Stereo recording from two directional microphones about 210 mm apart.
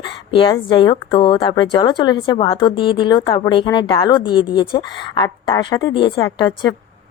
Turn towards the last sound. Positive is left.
turn(degrees=20)  # may be behind; listen again after turning